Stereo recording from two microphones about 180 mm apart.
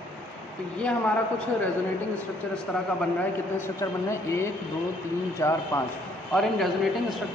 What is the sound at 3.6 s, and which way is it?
Speech, 15° left (ahead or behind).